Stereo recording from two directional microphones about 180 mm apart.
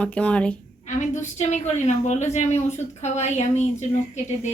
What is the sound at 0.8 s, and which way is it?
A woman's voice, 40° left (ahead or behind).